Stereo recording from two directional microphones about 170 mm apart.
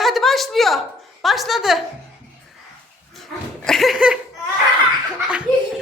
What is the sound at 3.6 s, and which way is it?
Speech, centre (ahead or behind).